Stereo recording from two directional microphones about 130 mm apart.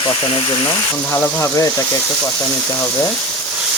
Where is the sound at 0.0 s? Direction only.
45° left (ahead or behind).